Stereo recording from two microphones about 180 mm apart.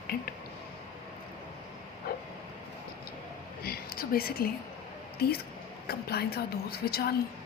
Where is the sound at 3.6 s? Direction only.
55° left (ahead or behind).